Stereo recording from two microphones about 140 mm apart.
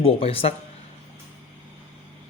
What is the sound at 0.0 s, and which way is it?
Speech, 45° left (ahead or behind).